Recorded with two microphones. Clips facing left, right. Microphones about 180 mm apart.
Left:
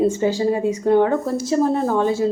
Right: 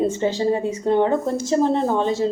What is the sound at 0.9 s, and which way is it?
A woman's voice, 20° right (ahead or behind).